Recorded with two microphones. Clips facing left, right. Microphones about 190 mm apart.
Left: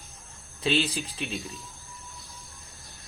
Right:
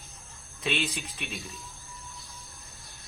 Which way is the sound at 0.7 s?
30° left (ahead or behind).